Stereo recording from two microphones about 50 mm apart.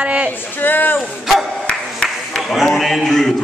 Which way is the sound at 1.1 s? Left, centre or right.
Centre.